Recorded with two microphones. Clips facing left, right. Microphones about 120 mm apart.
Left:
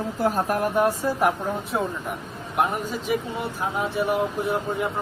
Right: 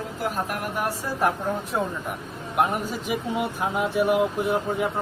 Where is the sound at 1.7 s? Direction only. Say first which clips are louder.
Left 1 dB; 5° left (ahead or behind).